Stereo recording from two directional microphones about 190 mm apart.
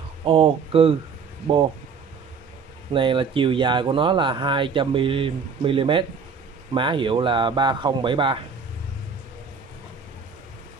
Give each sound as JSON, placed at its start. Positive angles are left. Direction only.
{"t": 0.2, "sound": "speech", "side_deg": -30}
{"t": 2.9, "sound": "speech", "side_deg": -25}